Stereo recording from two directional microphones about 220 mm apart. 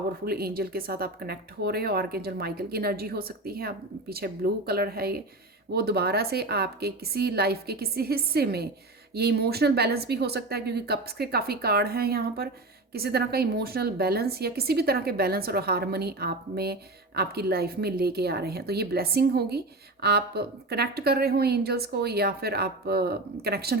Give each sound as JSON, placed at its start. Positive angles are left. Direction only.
{"t": 0.3, "sound": "speech", "side_deg": -45}